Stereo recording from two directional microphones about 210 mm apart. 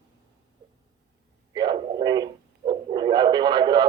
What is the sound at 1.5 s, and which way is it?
Speech, 20° right (ahead or behind).